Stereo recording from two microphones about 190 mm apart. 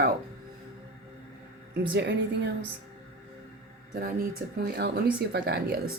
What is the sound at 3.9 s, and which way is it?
A woman's voice, 50° right (ahead or behind).